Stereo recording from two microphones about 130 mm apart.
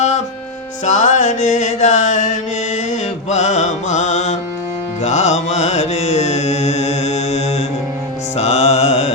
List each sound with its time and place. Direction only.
0.9 s mantra: 65° left (ahead or behind)
5.0 s music: 60° left (ahead or behind)